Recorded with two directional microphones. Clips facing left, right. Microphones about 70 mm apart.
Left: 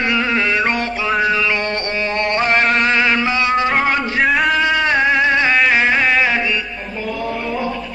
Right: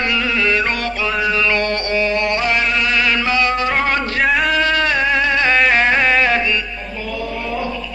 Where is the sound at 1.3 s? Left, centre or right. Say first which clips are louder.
Right 1 dB; centre; by 2.9 s left.